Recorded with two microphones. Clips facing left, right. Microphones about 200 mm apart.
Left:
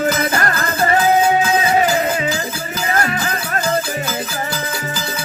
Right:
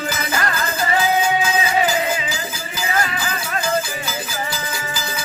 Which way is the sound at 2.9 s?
50° left (ahead or behind).